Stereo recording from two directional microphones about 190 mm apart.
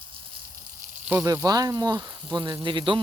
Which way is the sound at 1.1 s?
15° right (ahead or behind).